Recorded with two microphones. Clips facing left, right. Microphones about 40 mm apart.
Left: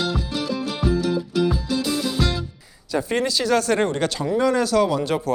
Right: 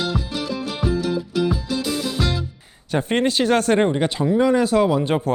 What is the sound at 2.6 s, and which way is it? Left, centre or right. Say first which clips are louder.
Speech: right 1 dB; right.